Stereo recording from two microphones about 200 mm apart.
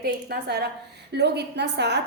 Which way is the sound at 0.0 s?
55° right (ahead or behind).